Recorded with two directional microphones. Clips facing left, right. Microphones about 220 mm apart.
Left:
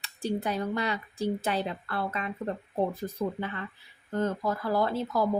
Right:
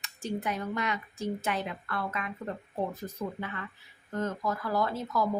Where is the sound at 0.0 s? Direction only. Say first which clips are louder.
Left 3 dB; 35° left (ahead or behind).